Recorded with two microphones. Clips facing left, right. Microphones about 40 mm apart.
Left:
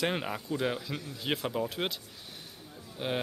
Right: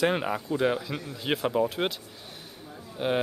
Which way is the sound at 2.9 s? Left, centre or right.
Centre.